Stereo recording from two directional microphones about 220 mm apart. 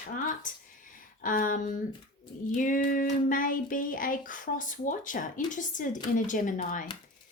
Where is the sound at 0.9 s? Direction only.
35° left (ahead or behind).